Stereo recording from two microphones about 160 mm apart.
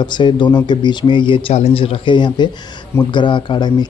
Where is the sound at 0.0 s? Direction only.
30° left (ahead or behind).